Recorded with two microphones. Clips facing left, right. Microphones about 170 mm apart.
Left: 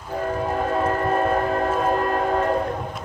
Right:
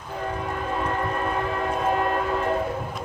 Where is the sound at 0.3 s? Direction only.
45° left (ahead or behind).